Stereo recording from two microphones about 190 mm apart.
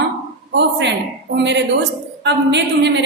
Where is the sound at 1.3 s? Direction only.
65° right (ahead or behind).